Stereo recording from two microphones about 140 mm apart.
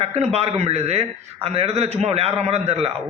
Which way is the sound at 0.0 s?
45° right (ahead or behind).